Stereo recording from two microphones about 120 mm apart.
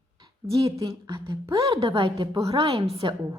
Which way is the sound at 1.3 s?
50° right (ahead or behind).